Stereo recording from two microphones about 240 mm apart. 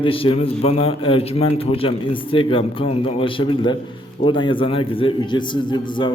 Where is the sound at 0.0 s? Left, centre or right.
Left.